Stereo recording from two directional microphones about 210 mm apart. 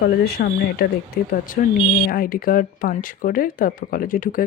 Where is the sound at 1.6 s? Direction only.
40° left (ahead or behind).